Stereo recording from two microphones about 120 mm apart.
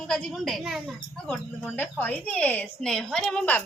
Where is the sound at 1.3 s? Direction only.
10° left (ahead or behind).